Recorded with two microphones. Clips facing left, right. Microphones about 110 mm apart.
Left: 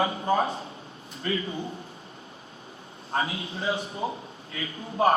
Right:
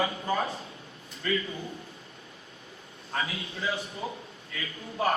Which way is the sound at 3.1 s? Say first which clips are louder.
Left 4 dB; 40° left (ahead or behind).